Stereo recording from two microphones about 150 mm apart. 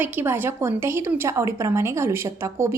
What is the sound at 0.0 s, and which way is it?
A woman's voice, 15° right (ahead or behind).